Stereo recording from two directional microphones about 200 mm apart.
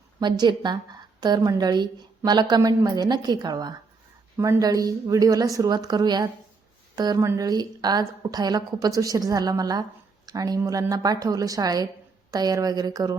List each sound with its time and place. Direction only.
0.2 s a woman's voice: 20° right (ahead or behind)